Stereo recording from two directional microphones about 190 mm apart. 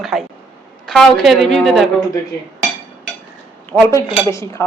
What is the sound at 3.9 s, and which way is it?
Speech, 15° left (ahead or behind).